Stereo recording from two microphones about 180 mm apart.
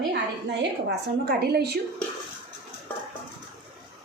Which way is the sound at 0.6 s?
65° right (ahead or behind).